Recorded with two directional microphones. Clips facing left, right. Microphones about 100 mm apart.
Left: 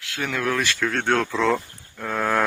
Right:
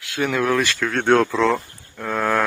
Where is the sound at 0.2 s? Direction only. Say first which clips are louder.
Right 5 dB; 10° right (ahead or behind).